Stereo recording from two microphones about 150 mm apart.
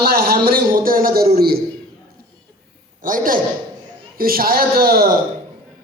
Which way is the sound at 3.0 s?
65° right (ahead or behind).